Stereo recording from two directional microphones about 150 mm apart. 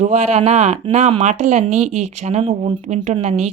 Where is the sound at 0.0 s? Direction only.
45° right (ahead or behind).